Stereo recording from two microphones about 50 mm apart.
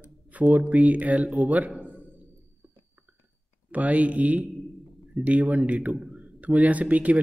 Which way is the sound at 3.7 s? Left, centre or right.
Right.